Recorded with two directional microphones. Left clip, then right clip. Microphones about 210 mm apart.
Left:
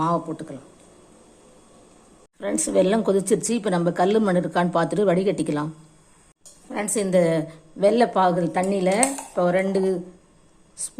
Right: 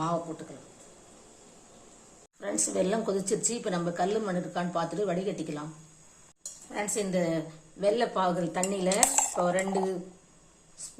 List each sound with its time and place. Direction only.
0.0 s a woman's voice: 25° left (ahead or behind)
2.4 s a woman's voice: 20° left (ahead or behind)
6.7 s a woman's voice: 25° left (ahead or behind)